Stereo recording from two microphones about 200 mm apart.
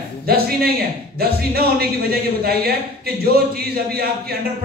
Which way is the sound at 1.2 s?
50° right (ahead or behind).